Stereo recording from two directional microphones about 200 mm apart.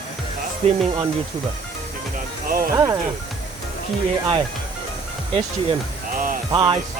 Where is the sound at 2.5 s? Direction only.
45° right (ahead or behind).